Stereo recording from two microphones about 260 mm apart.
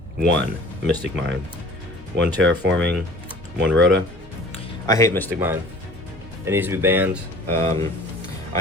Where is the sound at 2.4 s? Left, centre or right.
Right.